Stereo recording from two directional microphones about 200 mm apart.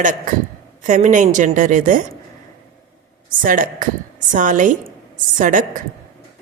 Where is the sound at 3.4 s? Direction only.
40° right (ahead or behind).